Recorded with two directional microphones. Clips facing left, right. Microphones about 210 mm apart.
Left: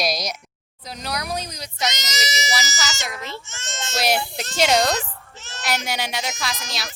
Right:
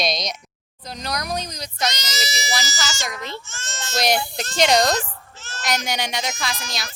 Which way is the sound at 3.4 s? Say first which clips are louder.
Left 1 dB; 20° left (ahead or behind).